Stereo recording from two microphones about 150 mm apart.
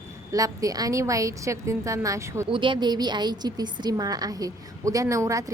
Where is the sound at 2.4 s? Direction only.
35° right (ahead or behind).